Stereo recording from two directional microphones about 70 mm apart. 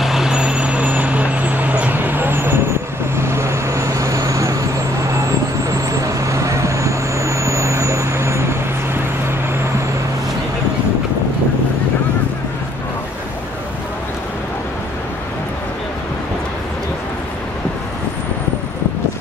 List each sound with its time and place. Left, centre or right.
0.0 s vehicle: centre; by 4.6 s right
5.7 s vehicle: right